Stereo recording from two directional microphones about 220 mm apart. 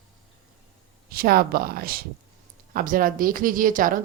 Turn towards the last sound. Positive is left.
turn(degrees=-40)  # may be behind; listen again after turning